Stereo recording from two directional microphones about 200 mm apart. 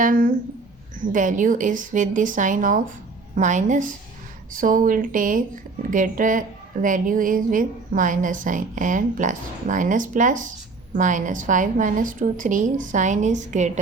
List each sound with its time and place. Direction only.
0.0 s a woman's voice: 40° right (ahead or behind)